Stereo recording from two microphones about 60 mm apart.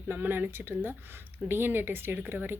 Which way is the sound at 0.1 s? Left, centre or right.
Right.